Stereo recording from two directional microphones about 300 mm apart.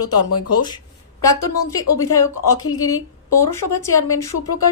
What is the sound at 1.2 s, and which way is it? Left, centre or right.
A woman's voice, centre.